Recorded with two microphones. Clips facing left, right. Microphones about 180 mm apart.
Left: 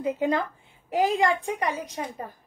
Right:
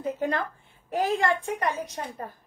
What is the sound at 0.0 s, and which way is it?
A woman's voice, 15° left (ahead or behind).